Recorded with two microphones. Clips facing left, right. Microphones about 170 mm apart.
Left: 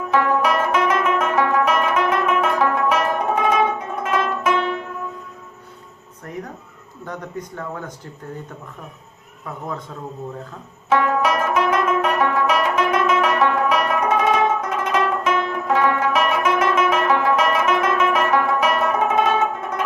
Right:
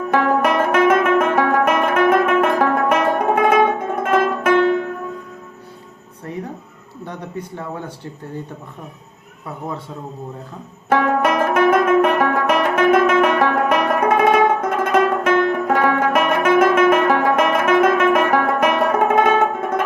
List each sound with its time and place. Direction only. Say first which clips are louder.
0.1 s music: right 2 dB; 55° right (ahead or behind)
6.3 s a sound: right 3 dB; 20° right (ahead or behind)
7.0 s speech: right 1 dB; 30° right (ahead or behind)
10.8 s music: right 2 dB; 55° right (ahead or behind)